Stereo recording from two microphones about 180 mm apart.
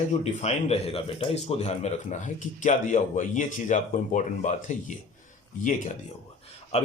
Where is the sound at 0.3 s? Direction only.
35° left (ahead or behind).